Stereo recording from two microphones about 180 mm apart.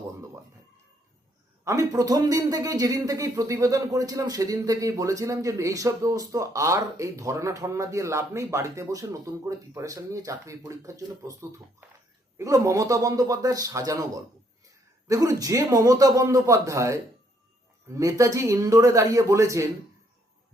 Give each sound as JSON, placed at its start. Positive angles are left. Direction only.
{"t": 1.6, "sound": "a man's voice", "side_deg": -20}